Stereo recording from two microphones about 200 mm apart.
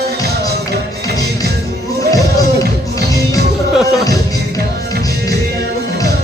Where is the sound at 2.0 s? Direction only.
15° left (ahead or behind).